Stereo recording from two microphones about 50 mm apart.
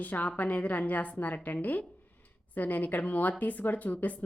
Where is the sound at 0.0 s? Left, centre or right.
Left.